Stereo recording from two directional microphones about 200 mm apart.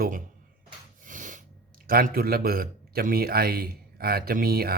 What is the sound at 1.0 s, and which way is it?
Snort, 40° right (ahead or behind).